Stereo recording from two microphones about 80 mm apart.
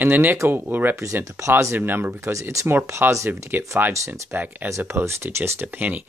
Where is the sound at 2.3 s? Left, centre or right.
Right.